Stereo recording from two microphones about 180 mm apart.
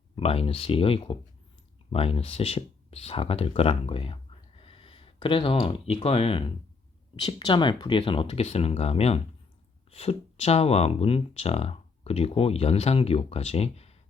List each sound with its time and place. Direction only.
0.2 s speech: 35° left (ahead or behind)